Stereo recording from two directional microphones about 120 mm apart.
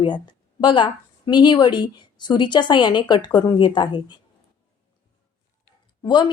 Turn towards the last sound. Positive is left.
turn(degrees=40)  # may be behind; listen again after turning